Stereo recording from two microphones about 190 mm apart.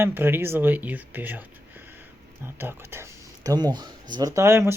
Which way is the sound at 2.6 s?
10° right (ahead or behind).